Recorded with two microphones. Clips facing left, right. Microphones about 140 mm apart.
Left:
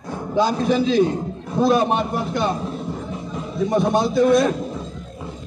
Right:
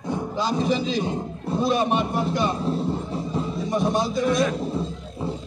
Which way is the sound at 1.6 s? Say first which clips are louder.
Left 4 dB; 50° left (ahead or behind).